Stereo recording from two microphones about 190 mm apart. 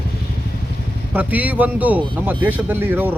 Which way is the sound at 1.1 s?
10° right (ahead or behind).